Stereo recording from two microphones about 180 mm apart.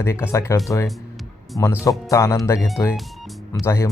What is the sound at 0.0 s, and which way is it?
Speech, 15° left (ahead or behind).